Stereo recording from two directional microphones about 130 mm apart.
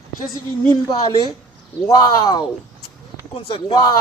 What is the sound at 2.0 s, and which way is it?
Speech, 35° left (ahead or behind).